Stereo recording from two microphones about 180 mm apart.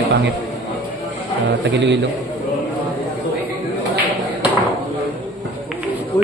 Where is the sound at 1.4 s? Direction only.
75° right (ahead or behind).